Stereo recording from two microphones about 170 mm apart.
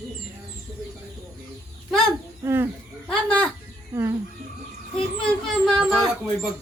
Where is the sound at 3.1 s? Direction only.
5° left (ahead or behind).